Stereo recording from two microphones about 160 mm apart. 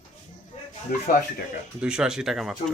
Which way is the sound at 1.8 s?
5° right (ahead or behind).